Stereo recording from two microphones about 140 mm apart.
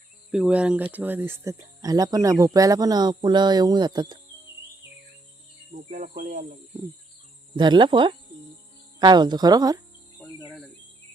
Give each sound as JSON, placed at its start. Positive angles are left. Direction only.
{"t": 0.3, "sound": "speech", "side_deg": -5}
{"t": 5.9, "sound": "cricket", "side_deg": -65}
{"t": 7.5, "sound": "speech", "side_deg": -35}